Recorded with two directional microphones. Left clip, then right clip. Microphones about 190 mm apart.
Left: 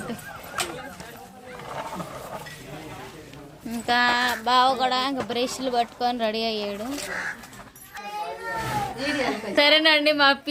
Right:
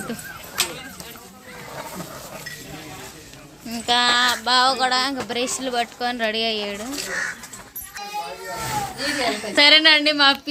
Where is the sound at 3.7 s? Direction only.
5° left (ahead or behind).